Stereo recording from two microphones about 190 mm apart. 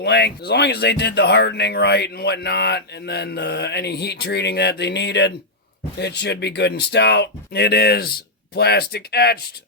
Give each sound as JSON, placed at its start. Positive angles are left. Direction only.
{"t": 0.0, "sound": "speech", "side_deg": 60}